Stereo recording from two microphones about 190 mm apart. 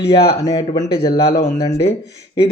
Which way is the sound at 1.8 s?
65° left (ahead or behind).